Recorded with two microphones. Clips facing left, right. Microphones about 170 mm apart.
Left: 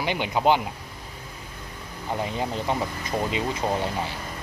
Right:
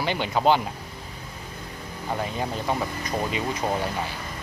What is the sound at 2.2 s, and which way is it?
Speech, 20° left (ahead or behind).